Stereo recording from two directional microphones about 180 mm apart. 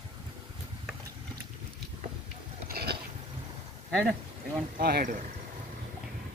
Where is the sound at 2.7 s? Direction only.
60° right (ahead or behind).